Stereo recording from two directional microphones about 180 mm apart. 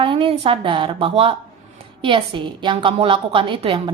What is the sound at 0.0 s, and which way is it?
A woman's voice, 30° right (ahead or behind).